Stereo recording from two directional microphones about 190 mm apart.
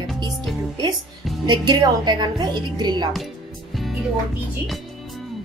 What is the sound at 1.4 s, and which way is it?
A woman's voice, 20° right (ahead or behind).